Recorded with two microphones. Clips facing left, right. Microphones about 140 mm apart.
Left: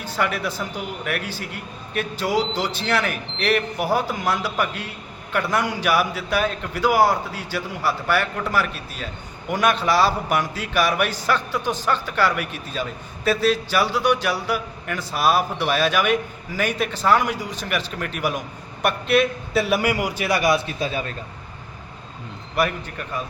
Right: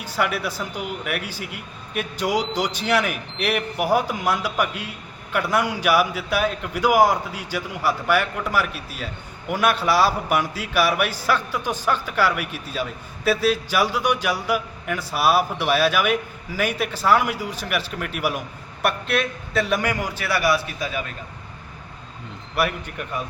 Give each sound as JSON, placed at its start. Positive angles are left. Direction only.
{"t": 0.0, "sound": "a man's voice", "side_deg": -10}
{"t": 22.5, "sound": "a man's voice", "side_deg": -5}